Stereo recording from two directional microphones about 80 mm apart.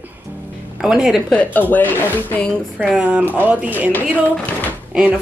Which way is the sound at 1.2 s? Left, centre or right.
Centre.